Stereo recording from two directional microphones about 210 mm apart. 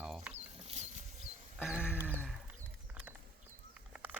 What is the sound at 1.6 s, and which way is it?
Sheep, 5° right (ahead or behind).